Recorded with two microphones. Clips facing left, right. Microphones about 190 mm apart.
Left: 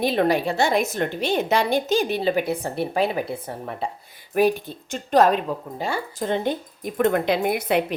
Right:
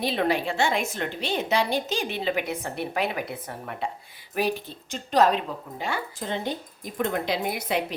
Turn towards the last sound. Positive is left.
turn(degrees=55)  # may be behind; listen again after turning